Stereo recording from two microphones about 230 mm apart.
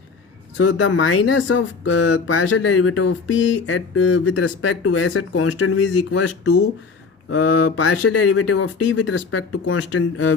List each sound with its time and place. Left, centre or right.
0.7 s speech: left